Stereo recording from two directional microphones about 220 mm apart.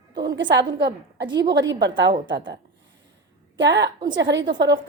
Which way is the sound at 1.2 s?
20° right (ahead or behind).